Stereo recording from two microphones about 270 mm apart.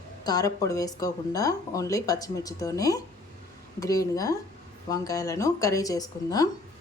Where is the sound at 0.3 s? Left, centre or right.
Centre.